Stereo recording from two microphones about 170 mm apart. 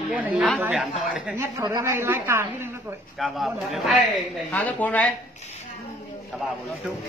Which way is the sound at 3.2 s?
Centre (ahead or behind).